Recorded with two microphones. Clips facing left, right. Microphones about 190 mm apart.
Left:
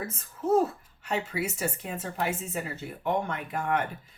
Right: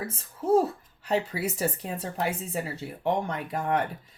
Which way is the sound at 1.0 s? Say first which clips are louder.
Right 3 dB; 35° right (ahead or behind).